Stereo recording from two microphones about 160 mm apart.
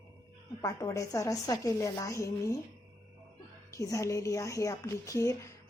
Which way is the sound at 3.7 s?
20° left (ahead or behind).